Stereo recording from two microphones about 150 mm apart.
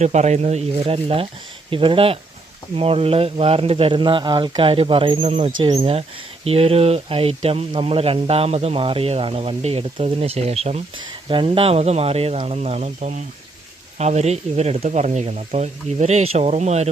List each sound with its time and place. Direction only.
0.0 s speech: 50° right (ahead or behind)
11.0 s speech: 30° right (ahead or behind); by 16.9 s 45° right (ahead or behind)